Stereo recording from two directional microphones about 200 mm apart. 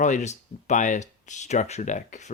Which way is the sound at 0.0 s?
35° left (ahead or behind).